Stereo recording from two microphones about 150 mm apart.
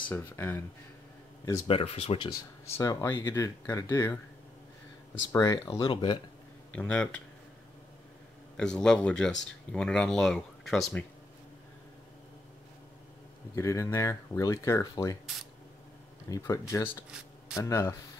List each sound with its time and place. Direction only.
0.1 s speech: 15° left (ahead or behind)
1.7 s speech: 40° left (ahead or behind)
2.8 s speech: 20° left (ahead or behind)
5.3 s speech: 25° left (ahead or behind)
6.7 s speech: 10° left (ahead or behind)
8.5 s speech: 5° left (ahead or behind)
13.6 s speech: 20° left (ahead or behind)
16.3 s speech: 20° left (ahead or behind)